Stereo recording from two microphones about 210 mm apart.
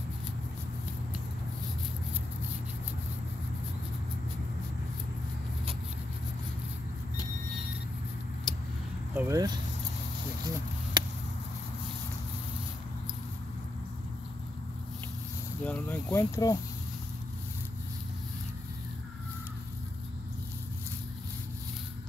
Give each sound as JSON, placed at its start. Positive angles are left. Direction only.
{"t": 8.5, "sound": "vehicle", "side_deg": 0}
{"t": 9.1, "sound": "speech", "side_deg": -10}
{"t": 10.4, "sound": "a sound", "side_deg": -20}
{"t": 15.6, "sound": "speech", "side_deg": 10}